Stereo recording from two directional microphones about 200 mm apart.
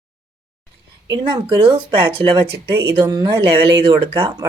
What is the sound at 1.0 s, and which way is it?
Speech, 20° right (ahead or behind).